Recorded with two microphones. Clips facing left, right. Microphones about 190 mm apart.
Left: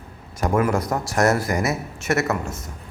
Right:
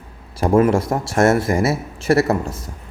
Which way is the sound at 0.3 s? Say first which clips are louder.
Right 6 dB; 30° right (ahead or behind).